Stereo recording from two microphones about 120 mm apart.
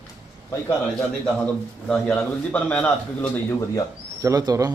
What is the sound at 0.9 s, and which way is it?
A man's voice, 10° left (ahead or behind).